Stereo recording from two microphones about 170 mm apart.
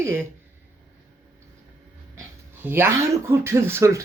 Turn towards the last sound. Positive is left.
turn(degrees=-15)  # may be behind; listen again after turning